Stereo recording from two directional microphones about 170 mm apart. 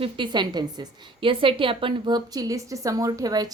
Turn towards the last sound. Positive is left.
turn(degrees=-20)  # may be behind; listen again after turning